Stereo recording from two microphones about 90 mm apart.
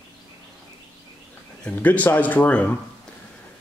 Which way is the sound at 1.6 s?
15° left (ahead or behind).